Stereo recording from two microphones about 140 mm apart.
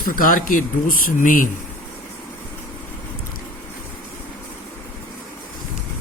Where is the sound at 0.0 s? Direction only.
80° left.